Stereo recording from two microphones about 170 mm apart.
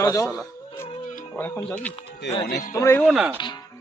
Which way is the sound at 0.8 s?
35° left (ahead or behind).